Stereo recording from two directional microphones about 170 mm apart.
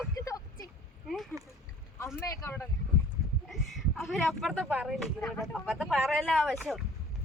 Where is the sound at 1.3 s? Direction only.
20° right (ahead or behind).